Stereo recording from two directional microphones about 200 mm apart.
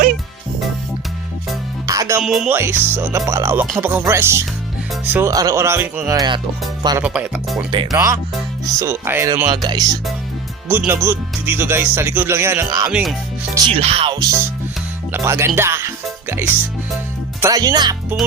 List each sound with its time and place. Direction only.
1.9 s music: 15° right (ahead or behind)
2.2 s speech: 5° right (ahead or behind); by 6.4 s 20° right (ahead or behind)
7.0 s speech: 5° right (ahead or behind)
7.9 s speech: 15° right (ahead or behind)
12.9 s speech: 5° right (ahead or behind)
13.7 s speech: 30° right (ahead or behind)